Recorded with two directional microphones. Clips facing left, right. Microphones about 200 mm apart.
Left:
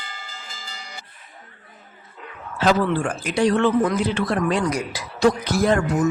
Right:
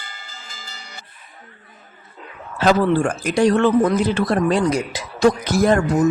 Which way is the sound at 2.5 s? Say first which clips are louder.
Right 3 dB; 45° right (ahead or behind).